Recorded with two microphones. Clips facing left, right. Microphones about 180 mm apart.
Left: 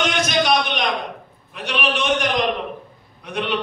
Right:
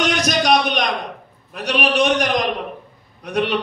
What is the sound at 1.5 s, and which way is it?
Speech, 40° right (ahead or behind).